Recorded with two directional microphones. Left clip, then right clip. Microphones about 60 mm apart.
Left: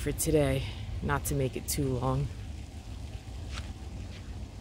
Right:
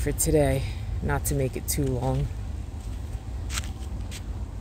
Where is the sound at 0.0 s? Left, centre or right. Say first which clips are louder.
Right 4 dB; centre.